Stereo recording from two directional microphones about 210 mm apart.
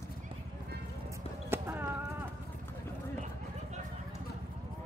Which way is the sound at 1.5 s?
10° right (ahead or behind).